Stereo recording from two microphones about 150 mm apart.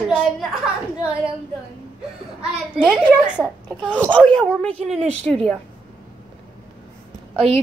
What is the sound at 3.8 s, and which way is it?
Speech, 10° right (ahead or behind).